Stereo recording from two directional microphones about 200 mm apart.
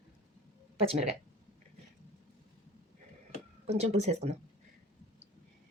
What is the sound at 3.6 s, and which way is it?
Speech, 30° right (ahead or behind).